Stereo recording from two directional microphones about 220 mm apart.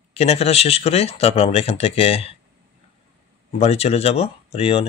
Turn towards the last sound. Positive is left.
turn(degrees=25)  # may be behind; listen again after turning